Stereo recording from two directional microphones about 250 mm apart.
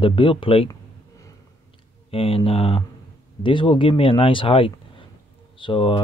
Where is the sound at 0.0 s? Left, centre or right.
Left.